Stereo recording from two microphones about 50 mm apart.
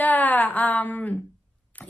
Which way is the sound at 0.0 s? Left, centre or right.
Left.